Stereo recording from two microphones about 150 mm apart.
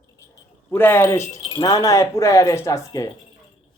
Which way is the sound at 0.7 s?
15° left (ahead or behind).